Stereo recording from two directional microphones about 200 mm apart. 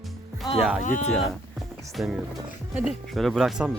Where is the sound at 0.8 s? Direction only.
40° left (ahead or behind).